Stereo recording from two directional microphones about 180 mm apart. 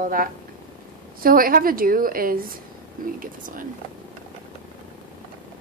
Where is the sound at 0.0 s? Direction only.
50° right (ahead or behind).